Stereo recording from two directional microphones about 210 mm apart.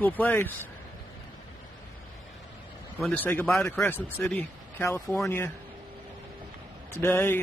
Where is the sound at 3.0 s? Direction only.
10° left (ahead or behind).